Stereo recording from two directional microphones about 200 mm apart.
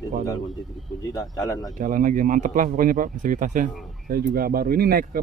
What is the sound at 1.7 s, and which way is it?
Speech, 40° right (ahead or behind).